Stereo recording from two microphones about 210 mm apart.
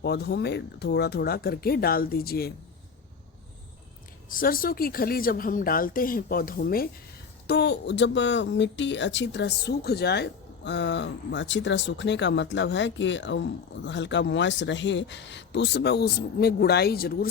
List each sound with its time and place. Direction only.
0.0 s a woman's voice: 50° left (ahead or behind)
4.3 s a woman's voice: 40° left (ahead or behind)